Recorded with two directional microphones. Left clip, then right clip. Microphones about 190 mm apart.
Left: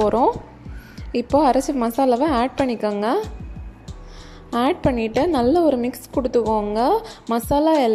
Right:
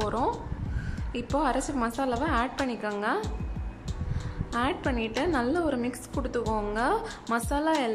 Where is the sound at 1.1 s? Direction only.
25° left (ahead or behind).